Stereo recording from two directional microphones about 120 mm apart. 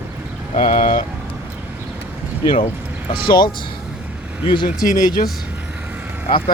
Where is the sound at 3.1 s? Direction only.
40° left (ahead or behind).